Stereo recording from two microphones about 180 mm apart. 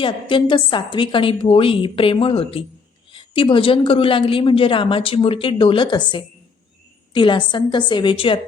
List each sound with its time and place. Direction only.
0.0 s speech: 25° left (ahead or behind)